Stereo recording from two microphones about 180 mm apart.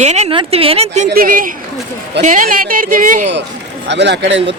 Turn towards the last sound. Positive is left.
turn(degrees=-75)  # may be behind; listen again after turning